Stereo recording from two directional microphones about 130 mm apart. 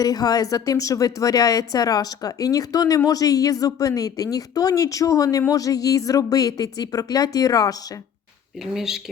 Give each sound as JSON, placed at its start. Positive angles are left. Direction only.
{"t": 0.0, "sound": "a woman's voice", "side_deg": 30}
{"t": 8.5, "sound": "speech", "side_deg": -5}